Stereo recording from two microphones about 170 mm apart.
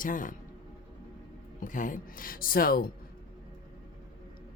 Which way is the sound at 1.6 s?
50° left (ahead or behind).